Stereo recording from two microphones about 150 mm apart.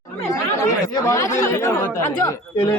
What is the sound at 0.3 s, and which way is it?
Speech, 20° left (ahead or behind).